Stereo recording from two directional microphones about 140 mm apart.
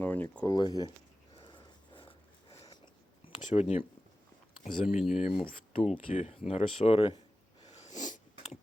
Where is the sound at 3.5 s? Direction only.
45° left (ahead or behind).